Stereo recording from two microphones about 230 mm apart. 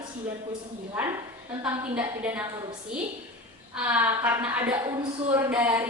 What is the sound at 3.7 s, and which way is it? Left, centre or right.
A woman's voice, centre.